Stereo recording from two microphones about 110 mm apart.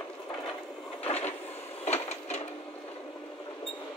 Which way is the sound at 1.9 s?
80° left.